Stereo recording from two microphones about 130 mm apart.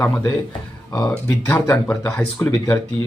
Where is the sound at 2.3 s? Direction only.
25° left (ahead or behind).